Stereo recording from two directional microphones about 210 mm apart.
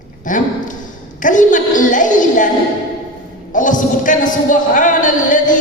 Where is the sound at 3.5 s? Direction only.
40° left (ahead or behind).